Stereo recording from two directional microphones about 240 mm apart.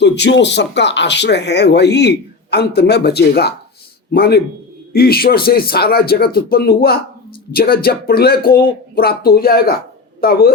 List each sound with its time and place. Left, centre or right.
0.0 s speech: left